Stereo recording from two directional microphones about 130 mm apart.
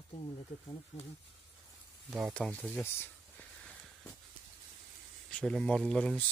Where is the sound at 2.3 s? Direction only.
5° left (ahead or behind).